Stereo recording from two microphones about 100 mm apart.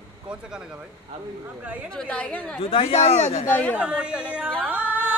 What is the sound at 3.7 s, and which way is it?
Speech, 10° right (ahead or behind).